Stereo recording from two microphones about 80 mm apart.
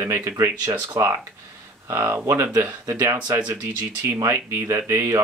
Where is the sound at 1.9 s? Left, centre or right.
Right.